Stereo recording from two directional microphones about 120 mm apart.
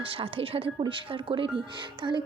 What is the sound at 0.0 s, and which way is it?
Speech, 50° right (ahead or behind).